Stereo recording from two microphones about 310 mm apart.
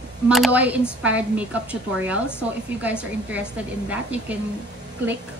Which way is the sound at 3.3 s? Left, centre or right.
Centre.